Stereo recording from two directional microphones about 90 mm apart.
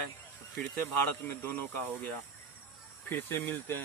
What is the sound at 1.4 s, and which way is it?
Speech, 20° left (ahead or behind).